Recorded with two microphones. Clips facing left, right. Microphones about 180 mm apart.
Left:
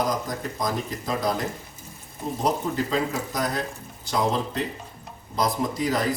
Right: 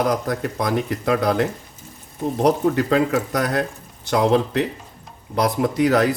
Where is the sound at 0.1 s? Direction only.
65° right (ahead or behind).